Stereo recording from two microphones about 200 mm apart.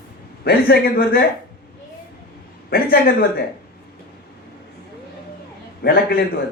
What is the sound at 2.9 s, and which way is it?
Speech, 50° left (ahead or behind).